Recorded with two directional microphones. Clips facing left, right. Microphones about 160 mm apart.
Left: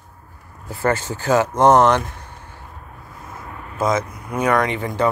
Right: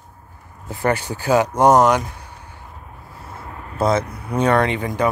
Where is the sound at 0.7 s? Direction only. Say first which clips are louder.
Even; 15° right (ahead or behind).